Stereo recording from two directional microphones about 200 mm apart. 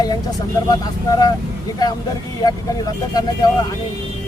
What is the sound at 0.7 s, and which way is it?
Speech, 20° left (ahead or behind).